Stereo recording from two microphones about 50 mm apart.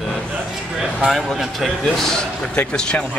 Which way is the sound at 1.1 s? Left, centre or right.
Centre.